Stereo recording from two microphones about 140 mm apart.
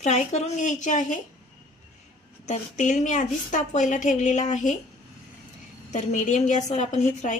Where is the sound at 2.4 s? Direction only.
60° left (ahead or behind).